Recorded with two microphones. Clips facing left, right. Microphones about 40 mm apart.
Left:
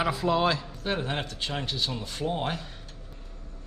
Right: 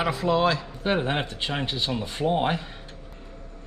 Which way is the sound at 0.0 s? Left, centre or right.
Centre.